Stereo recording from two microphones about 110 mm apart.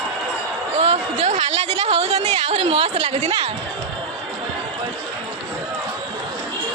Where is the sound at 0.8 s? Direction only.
75° right (ahead or behind).